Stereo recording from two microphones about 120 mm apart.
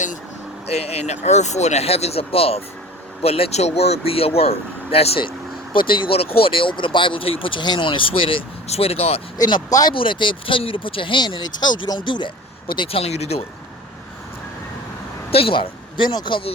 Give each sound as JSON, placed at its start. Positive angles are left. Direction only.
{"t": 0.7, "sound": "speech", "side_deg": 60}
{"t": 9.4, "sound": "speech", "side_deg": 35}
{"t": 9.9, "sound": "speech", "side_deg": 45}
{"t": 15.3, "sound": "speech", "side_deg": 50}